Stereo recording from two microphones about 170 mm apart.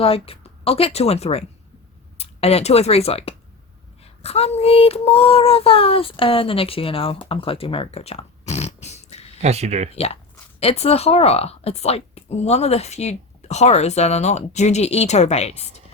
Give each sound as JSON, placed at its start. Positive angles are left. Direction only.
{"t": 0.0, "sound": "a woman's voice", "side_deg": 35}
{"t": 4.0, "sound": "child singing", "side_deg": 35}
{"t": 9.4, "sound": "speech", "side_deg": -40}
{"t": 10.6, "sound": "a woman's voice", "side_deg": 35}